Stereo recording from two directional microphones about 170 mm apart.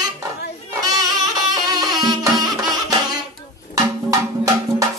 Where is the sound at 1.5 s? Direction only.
25° right (ahead or behind).